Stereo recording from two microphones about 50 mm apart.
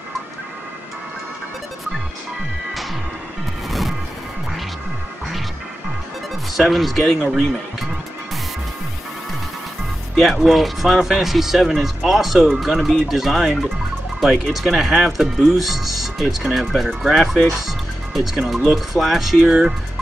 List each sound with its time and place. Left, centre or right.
3.6 s smash: centre
6.5 s speech: centre
7.2 s speech: centre
10.1 s speech: centre
17.6 s music: centre
18.7 s speech: centre
19.4 s speech: centre